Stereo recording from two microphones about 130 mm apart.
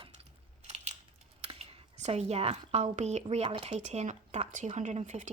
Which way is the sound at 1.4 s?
50° right (ahead or behind).